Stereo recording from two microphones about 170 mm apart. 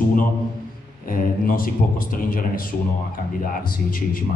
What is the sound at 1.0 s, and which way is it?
A man's voice, 55° left (ahead or behind).